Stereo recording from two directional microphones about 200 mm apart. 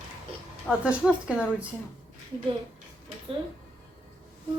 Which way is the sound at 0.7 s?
5° right (ahead or behind).